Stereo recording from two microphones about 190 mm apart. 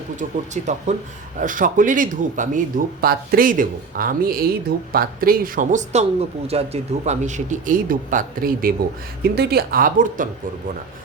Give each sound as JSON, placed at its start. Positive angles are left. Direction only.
{"t": 0.2, "sound": "speech", "side_deg": -40}